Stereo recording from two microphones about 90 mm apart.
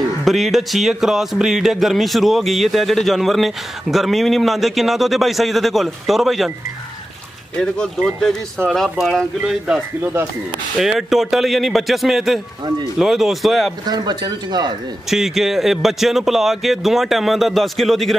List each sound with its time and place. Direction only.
0.2 s a man's voice: centre (ahead or behind)
7.5 s a man's voice: 10° left (ahead or behind)
9.1 s speech: 10° right (ahead or behind)
10.8 s a man's voice: centre (ahead or behind)
13.8 s speech: 50° right (ahead or behind)
15.0 s a man's voice: 5° right (ahead or behind)